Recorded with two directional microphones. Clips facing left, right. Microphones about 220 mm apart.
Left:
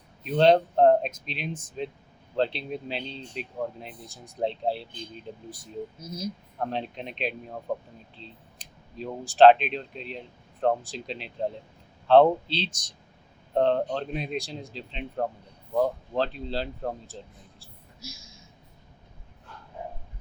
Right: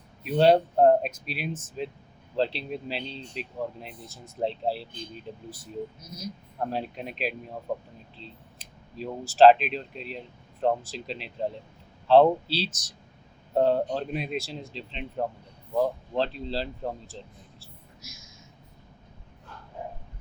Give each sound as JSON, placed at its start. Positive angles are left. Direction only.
{"t": 0.2, "sound": "speech", "side_deg": -5}
{"t": 6.6, "sound": "speech", "side_deg": -5}
{"t": 18.0, "sound": "a sound", "side_deg": 30}